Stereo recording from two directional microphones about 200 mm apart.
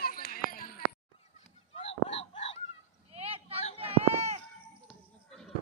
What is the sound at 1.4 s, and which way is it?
Honk, 30° left (ahead or behind).